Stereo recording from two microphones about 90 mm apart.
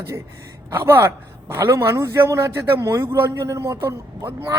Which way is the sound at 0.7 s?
25° right (ahead or behind).